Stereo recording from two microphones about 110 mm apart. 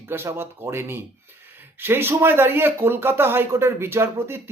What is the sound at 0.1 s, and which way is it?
Speech, 20° right (ahead or behind).